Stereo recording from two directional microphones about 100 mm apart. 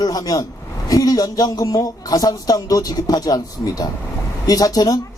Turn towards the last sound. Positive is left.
turn(degrees=40)  # may be behind; listen again after turning